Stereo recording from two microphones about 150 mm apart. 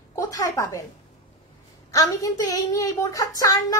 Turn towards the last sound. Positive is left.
turn(degrees=25)  # may be behind; listen again after turning